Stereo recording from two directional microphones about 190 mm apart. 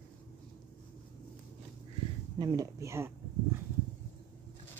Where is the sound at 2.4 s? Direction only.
20° right (ahead or behind).